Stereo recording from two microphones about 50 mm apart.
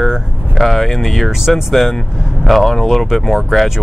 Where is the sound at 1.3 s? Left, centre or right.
Centre.